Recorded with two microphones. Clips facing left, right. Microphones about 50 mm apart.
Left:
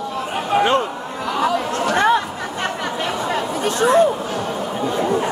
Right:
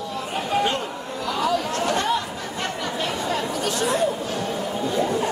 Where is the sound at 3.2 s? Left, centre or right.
Left.